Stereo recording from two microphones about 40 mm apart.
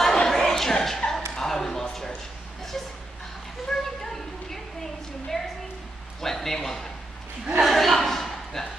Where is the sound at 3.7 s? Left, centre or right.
Centre.